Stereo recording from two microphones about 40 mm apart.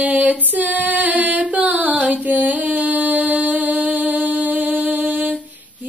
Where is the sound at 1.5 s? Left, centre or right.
Right.